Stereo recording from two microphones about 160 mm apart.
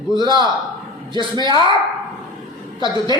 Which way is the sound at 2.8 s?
25° right (ahead or behind).